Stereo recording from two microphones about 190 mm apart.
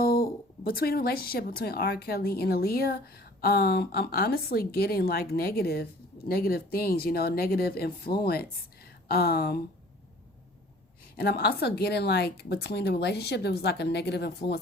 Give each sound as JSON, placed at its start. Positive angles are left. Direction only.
{"t": 0.0, "sound": "a woman's voice", "side_deg": 50}
{"t": 11.2, "sound": "a woman's voice", "side_deg": 55}